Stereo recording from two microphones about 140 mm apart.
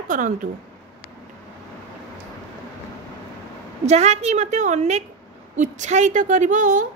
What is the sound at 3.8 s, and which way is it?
A woman's voice, 50° right (ahead or behind).